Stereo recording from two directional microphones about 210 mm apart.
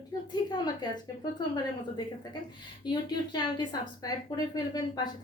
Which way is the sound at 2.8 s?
20° left (ahead or behind).